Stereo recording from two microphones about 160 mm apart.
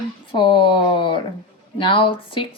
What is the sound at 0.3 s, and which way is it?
Speech, 30° left (ahead or behind).